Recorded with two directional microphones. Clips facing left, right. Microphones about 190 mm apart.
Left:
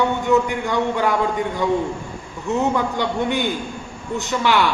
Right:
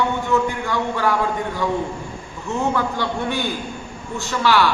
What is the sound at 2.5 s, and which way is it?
A man's voice, 20° left (ahead or behind).